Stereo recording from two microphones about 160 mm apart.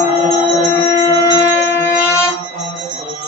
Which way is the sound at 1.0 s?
20° left (ahead or behind).